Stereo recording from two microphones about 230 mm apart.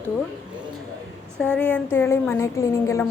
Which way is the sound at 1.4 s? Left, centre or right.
Centre.